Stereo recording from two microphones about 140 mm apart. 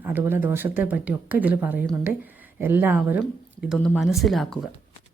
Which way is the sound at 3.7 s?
15° left (ahead or behind).